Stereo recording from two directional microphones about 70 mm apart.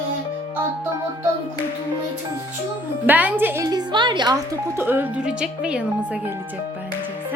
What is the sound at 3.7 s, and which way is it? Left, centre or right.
Music, right.